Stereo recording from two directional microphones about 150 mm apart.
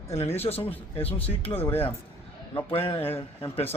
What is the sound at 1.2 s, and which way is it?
Speech, 40° left (ahead or behind).